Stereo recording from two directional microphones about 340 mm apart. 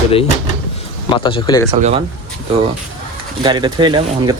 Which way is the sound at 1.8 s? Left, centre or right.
Centre.